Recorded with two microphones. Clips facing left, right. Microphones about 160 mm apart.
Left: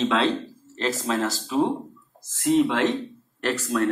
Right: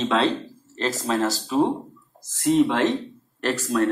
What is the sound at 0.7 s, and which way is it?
Speech, 40° right (ahead or behind).